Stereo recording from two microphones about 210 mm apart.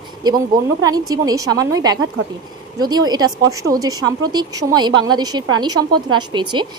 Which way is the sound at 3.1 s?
20° right (ahead or behind).